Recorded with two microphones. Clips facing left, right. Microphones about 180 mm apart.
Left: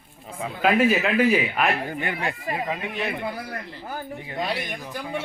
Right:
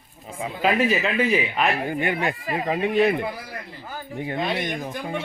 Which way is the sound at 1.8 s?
20° right (ahead or behind).